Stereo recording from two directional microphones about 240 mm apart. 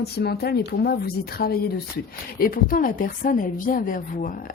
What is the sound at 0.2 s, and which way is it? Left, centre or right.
A woman's voice, left.